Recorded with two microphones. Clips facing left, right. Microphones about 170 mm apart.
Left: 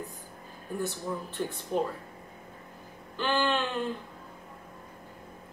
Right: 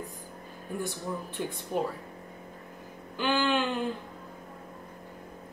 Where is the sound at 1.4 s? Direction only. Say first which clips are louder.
Left 1 dB; 10° right (ahead or behind).